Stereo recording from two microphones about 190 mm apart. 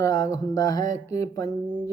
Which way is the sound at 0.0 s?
20° left (ahead or behind).